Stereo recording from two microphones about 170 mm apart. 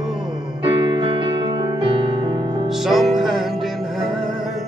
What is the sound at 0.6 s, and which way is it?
Music, 30° right (ahead or behind).